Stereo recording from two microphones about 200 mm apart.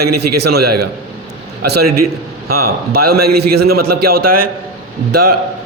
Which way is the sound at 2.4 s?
50° right (ahead or behind).